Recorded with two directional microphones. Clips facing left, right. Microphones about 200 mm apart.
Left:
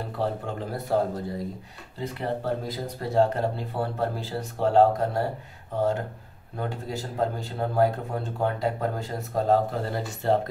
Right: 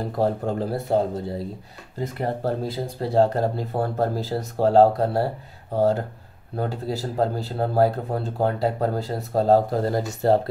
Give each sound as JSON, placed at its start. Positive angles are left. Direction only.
{"t": 0.0, "sound": "speech", "side_deg": -40}
{"t": 2.0, "sound": "speech", "side_deg": -45}